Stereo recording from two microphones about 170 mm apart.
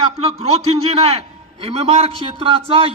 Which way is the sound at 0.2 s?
35° right (ahead or behind).